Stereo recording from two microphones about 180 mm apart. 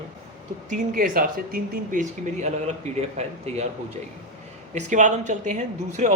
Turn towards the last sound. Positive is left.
turn(degrees=-40)  # may be behind; listen again after turning